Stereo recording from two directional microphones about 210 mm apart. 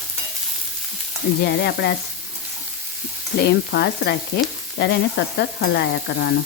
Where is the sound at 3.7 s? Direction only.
50° left (ahead or behind).